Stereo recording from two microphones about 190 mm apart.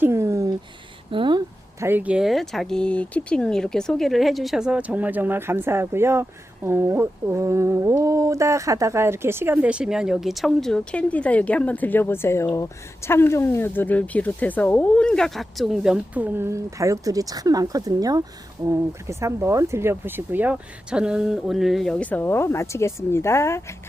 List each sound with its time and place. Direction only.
0.0 s a sound: 15° right (ahead or behind)
1.1 s speech: 25° right (ahead or behind)
1.8 s speech: 10° right (ahead or behind); by 23.6 s 15° left (ahead or behind)